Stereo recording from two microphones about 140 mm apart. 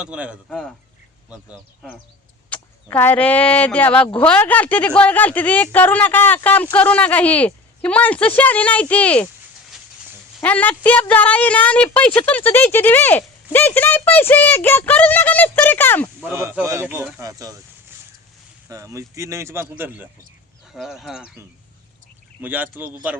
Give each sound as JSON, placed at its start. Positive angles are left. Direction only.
{"t": 0.0, "sound": "speech", "side_deg": -10}
{"t": 2.5, "sound": "speech", "side_deg": 15}
{"t": 10.4, "sound": "speech", "side_deg": 10}
{"t": 16.2, "sound": "speech", "side_deg": -20}
{"t": 18.7, "sound": "speech", "side_deg": -20}
{"t": 20.7, "sound": "speech", "side_deg": 0}
{"t": 22.4, "sound": "speech", "side_deg": -15}